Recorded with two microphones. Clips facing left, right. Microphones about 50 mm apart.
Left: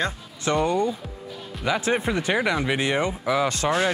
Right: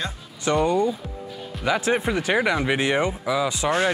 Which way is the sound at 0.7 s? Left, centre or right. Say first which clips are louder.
Right 2 dB; centre.